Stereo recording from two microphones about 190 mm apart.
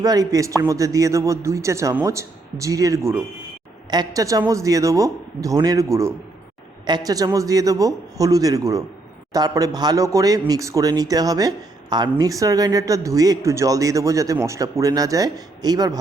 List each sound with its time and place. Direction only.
0.0 s a man's voice: 20° right (ahead or behind)